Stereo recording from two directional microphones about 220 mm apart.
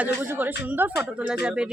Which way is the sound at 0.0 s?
10° right (ahead or behind).